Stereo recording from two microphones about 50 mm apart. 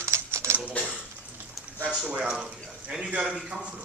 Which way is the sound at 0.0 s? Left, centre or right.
Right.